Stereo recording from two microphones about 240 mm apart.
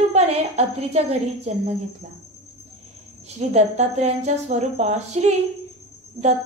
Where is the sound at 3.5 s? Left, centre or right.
Right.